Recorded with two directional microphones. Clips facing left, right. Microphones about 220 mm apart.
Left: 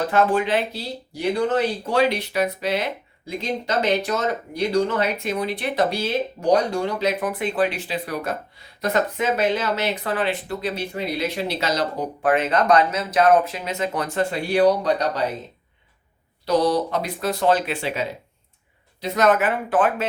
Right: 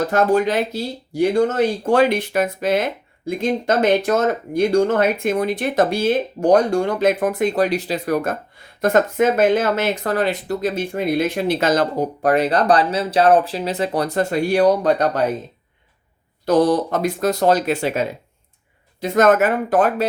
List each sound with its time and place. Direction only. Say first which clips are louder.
0.1 s speech: right 2 dB; 40° right (ahead or behind)
16.5 s speech: right 4 dB; 50° right (ahead or behind)